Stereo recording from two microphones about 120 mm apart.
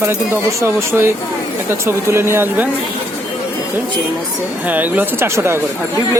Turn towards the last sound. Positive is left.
turn(degrees=-20)  # may be behind; listen again after turning